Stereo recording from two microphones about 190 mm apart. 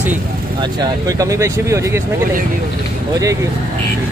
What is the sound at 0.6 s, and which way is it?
Speech, 20° right (ahead or behind).